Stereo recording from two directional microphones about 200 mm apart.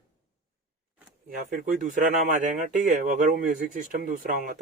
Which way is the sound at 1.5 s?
45° right (ahead or behind).